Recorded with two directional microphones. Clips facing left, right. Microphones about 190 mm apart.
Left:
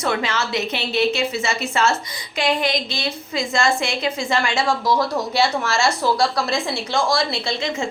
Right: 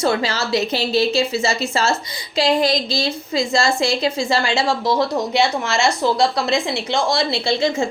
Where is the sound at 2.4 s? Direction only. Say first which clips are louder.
Right 4 dB; 35° right (ahead or behind).